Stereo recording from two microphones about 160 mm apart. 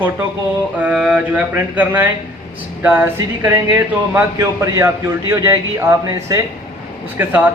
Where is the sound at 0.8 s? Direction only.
5° right (ahead or behind).